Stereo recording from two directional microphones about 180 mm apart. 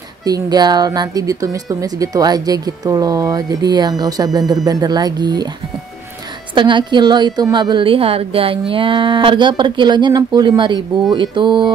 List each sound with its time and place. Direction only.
0.2 s a woman's voice: 20° right (ahead or behind)
6.5 s a woman's voice: 25° right (ahead or behind)